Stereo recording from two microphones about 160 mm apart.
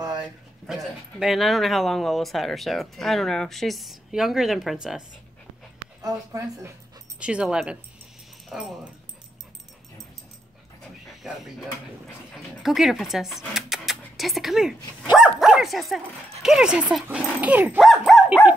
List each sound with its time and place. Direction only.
1.2 s speech: centre (ahead or behind)
6.0 s a woman's voice: 20° right (ahead or behind)
7.2 s dog: 5° right (ahead or behind)
8.5 s speech: 5° right (ahead or behind)
10.8 s dog: centre (ahead or behind)
12.4 s speech: centre (ahead or behind)
17.4 s dog: 10° right (ahead or behind)